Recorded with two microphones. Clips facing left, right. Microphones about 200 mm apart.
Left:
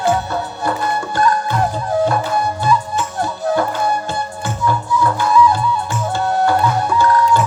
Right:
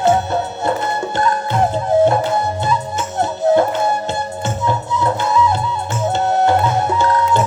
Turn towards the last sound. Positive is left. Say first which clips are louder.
# left 1 dB
turn(degrees=-25)  # may be behind; listen again after turning